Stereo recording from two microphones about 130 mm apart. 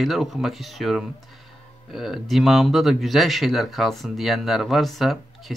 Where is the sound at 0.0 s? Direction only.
Centre (ahead or behind).